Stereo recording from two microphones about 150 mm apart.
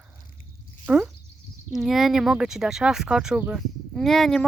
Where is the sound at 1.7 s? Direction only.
Centre (ahead or behind).